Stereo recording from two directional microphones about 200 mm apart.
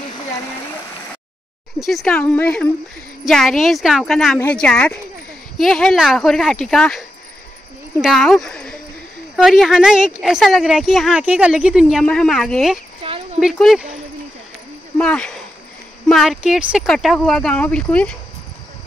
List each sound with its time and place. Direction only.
1.8 s a woman's voice: centre (ahead or behind)
13.0 s cricket: 25° right (ahead or behind)
13.4 s a woman's voice: centre (ahead or behind)
15.0 s a woman's voice: 5° left (ahead or behind)